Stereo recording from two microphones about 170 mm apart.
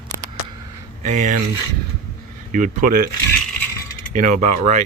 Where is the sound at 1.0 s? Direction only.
45° right (ahead or behind).